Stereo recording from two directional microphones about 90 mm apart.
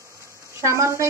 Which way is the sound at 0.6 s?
35° right (ahead or behind).